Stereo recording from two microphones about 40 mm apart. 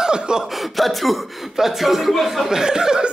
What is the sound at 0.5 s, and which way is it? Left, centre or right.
Speech, centre.